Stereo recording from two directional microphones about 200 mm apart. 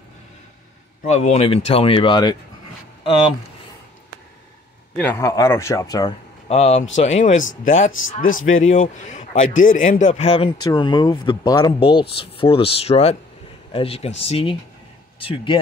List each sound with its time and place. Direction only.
1.0 s speech: 35° left (ahead or behind)
3.0 s a sound: 25° left (ahead or behind)
4.9 s speech: 10° left (ahead or behind)
6.5 s speech: 35° left (ahead or behind)
8.4 s speech: 85° left
8.6 s speech: 40° left (ahead or behind); by 15.6 s 25° left (ahead or behind)